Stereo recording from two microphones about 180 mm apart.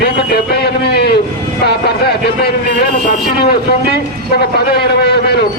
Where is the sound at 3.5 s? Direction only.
60° left (ahead or behind).